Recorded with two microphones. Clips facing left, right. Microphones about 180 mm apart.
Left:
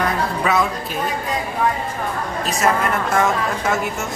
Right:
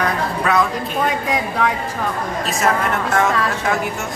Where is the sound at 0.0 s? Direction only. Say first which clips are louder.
Even; centre (ahead or behind).